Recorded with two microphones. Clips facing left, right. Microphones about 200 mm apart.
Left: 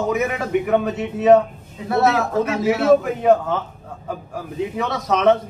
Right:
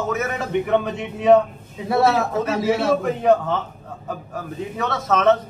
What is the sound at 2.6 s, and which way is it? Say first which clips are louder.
Speech: left 5 dB; 5° left (ahead or behind).